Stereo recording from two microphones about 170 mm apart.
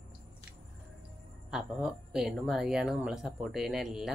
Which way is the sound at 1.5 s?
5° right (ahead or behind).